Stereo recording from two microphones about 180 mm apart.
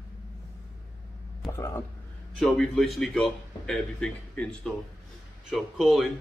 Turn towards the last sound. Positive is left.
turn(degrees=0)  # may be behind; listen again after turning